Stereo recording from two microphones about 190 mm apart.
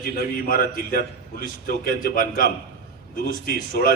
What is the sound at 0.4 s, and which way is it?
A man's voice, 50° left (ahead or behind).